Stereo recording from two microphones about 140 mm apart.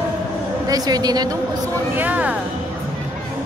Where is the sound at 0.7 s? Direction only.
25° right (ahead or behind).